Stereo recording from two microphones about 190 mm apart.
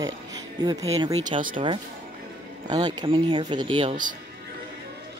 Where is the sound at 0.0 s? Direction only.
20° right (ahead or behind).